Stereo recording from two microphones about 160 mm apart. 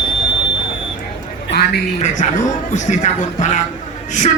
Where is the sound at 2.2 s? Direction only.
50° left (ahead or behind).